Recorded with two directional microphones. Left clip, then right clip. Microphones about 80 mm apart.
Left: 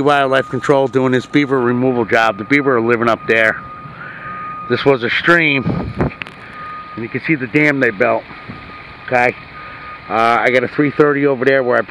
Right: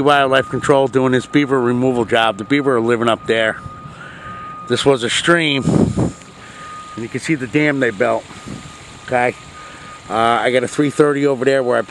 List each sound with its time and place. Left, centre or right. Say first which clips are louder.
0.0 s speech: even; right
1.8 s speech: left 1 dB; right
4.6 s speech: left 1 dB; right
7.0 s speech: left 2 dB; right